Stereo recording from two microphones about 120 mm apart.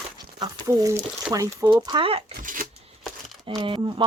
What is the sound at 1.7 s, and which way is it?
Speech, 40° right (ahead or behind).